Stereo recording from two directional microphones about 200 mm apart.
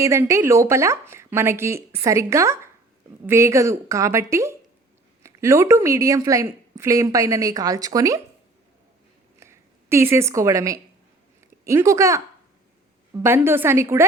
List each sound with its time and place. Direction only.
0.0 s speech: 15° right (ahead or behind)
9.4 s a woman's voice: 15° right (ahead or behind)